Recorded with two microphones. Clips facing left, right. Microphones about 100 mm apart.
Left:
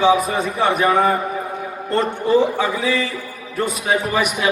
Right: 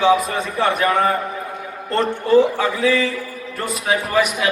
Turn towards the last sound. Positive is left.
turn(degrees=0)  # may be behind; listen again after turning